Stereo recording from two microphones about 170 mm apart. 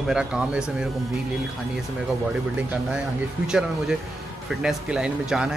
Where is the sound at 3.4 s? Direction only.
5° right (ahead or behind).